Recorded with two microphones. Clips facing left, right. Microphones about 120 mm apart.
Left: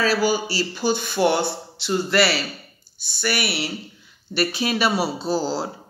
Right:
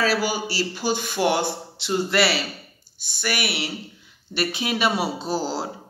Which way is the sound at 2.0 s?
25° right (ahead or behind).